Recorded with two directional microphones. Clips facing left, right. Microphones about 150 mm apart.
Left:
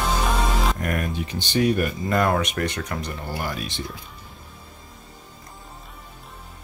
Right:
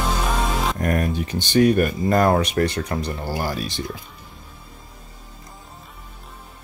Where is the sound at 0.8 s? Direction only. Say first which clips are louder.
Right 4 dB; 35° right (ahead or behind).